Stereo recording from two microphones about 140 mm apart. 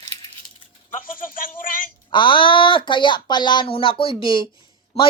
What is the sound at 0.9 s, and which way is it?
Speech, 80° left.